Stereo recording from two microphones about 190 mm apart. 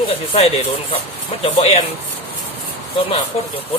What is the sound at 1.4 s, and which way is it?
Speech, 35° left (ahead or behind).